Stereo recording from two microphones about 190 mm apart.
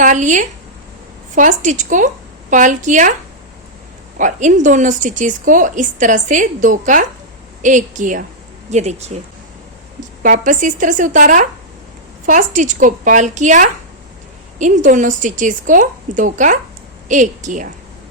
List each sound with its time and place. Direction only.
0.0 s speech: 40° right (ahead or behind)
4.2 s speech: 40° right (ahead or behind)
10.2 s a woman's voice: 40° right (ahead or behind)